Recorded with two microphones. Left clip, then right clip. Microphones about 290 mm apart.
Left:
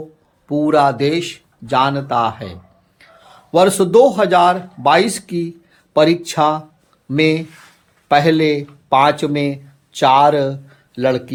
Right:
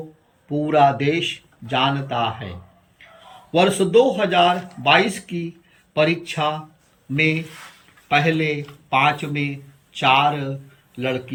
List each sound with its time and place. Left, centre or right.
0.6 s speech: centre
8.0 s speech: centre